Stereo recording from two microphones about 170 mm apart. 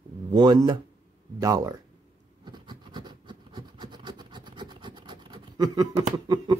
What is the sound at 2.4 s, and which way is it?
Scratch, 25° right (ahead or behind).